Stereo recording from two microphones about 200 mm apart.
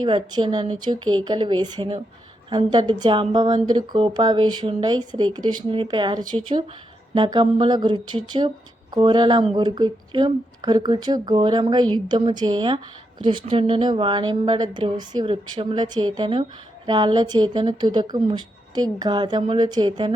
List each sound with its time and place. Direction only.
0.0 s speech: 25° right (ahead or behind)